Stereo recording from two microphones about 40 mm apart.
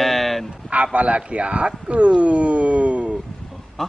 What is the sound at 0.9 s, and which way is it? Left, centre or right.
Speech, right.